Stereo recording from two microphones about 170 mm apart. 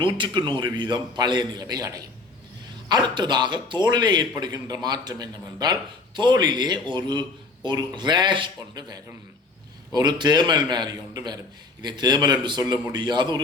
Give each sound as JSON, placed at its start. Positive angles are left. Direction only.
{"t": 0.0, "sound": "a man's voice", "side_deg": -30}